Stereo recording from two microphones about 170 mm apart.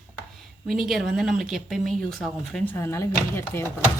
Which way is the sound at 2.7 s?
15° left (ahead or behind).